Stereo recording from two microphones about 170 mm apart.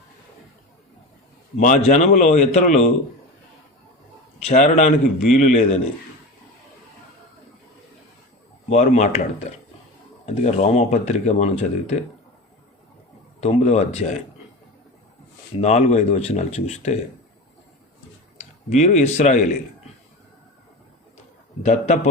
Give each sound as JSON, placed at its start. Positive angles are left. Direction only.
{"t": 1.5, "sound": "speech", "side_deg": 45}
{"t": 4.6, "sound": "speech", "side_deg": 45}
{"t": 8.7, "sound": "speech", "side_deg": 40}
{"t": 10.2, "sound": "speech", "side_deg": 40}
{"t": 13.4, "sound": "speech", "side_deg": 40}
{"t": 15.6, "sound": "speech", "side_deg": 40}
{"t": 18.3, "sound": "speech", "side_deg": 45}
{"t": 21.6, "sound": "speech", "side_deg": 45}